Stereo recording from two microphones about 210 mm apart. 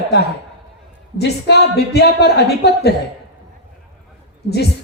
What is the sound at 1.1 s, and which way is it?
A woman's voice, 50° left (ahead or behind).